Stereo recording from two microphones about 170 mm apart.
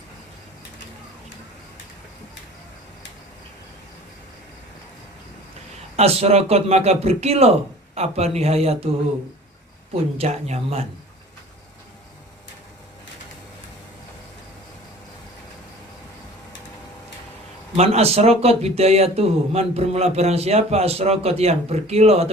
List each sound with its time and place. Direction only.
6.0 s speech: 40° right (ahead or behind)
10.2 s speech: 40° right (ahead or behind)
17.7 s speech: 40° right (ahead or behind)